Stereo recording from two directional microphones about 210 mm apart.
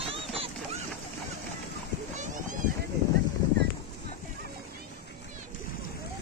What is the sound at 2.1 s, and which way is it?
Splash, 35° right (ahead or behind).